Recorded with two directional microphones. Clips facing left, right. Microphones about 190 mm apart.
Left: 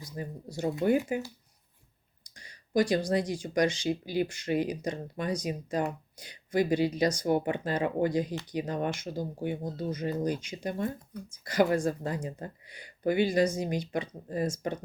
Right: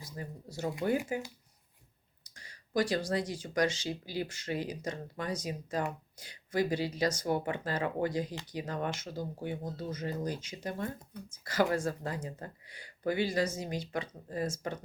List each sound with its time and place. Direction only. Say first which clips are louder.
0.2 s speech: left 4 dB; 15° left (ahead or behind)
2.3 s speech: left 4 dB; 15° left (ahead or behind)